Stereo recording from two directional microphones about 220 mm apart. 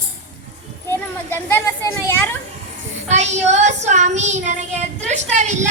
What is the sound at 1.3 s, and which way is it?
Speech, 10° left (ahead or behind).